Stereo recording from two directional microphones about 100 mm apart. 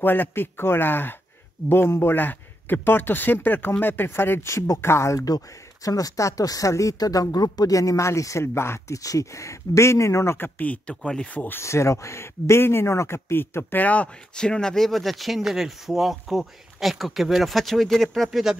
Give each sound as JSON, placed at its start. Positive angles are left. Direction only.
{"t": 0.0, "sound": "a man's voice", "side_deg": 20}
{"t": 11.4, "sound": "a man's voice", "side_deg": 25}